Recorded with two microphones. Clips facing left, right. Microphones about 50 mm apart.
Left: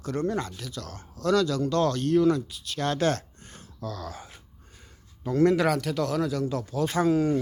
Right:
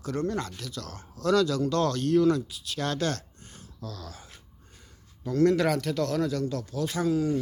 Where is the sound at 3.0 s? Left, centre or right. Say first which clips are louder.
Left 4 dB; left.